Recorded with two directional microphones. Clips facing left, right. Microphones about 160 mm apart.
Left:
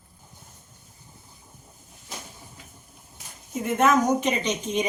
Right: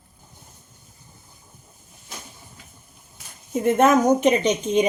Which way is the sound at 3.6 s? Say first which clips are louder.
Right 4 dB; 20° right (ahead or behind).